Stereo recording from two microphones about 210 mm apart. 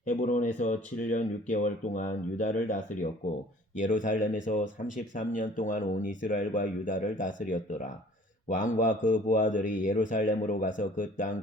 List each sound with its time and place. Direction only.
0.1 s speech: 40° left (ahead or behind)
3.8 s speech: 35° left (ahead or behind)